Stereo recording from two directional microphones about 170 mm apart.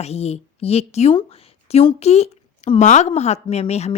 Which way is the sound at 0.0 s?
40° left (ahead or behind).